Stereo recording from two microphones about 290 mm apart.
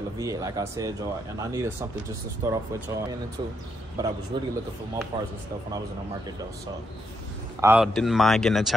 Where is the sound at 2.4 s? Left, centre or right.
Centre.